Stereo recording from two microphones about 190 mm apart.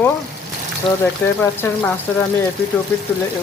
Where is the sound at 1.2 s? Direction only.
10° left (ahead or behind).